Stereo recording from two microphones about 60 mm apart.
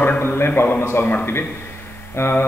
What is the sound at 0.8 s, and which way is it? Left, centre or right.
Mantra, left.